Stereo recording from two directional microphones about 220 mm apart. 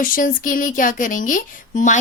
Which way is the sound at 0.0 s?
40° left (ahead or behind).